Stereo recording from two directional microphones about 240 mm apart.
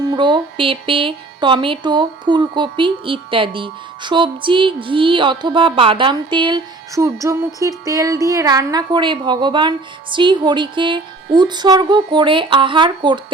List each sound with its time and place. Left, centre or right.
0.0 s music: centre